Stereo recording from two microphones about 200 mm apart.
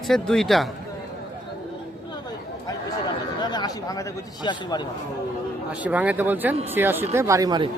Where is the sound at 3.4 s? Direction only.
20° left (ahead or behind).